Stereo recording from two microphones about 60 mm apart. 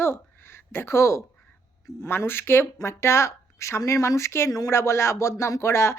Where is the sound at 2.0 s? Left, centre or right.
Left.